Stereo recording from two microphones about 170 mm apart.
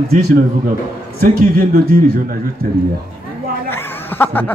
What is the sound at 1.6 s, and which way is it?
Speech, 60° right (ahead or behind).